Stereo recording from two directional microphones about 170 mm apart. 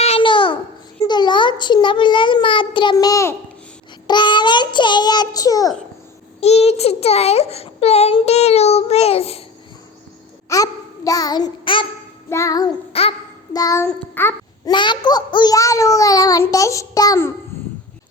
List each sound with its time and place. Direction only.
0.0 s babbling: 35° left (ahead or behind)
1.0 s a child's voice: 25° left (ahead or behind)
4.0 s child singing: 25° left (ahead or behind)
6.4 s a child's voice: 40° left (ahead or behind)
10.5 s a sound: 20° left (ahead or behind)
12.3 s a child's voice: 20° left (ahead or behind)
12.9 s babbling: 35° left (ahead or behind)
13.5 s child singing: 20° left (ahead or behind)
14.7 s a child's voice: 25° left (ahead or behind)
17.5 s a sound: 15° left (ahead or behind)